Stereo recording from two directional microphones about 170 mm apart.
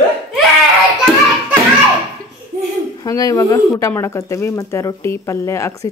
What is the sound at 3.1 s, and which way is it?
Speech, 20° left (ahead or behind).